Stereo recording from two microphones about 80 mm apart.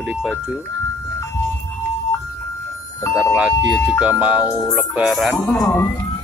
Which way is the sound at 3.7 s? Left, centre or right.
Left.